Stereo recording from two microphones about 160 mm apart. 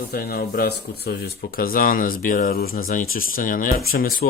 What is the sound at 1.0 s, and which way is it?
Speech, 90° left.